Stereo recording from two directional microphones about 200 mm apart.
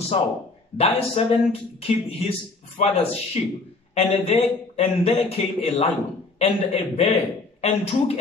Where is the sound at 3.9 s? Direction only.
30° left (ahead or behind).